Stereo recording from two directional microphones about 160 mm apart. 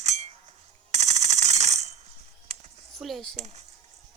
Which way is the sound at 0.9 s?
45° right (ahead or behind).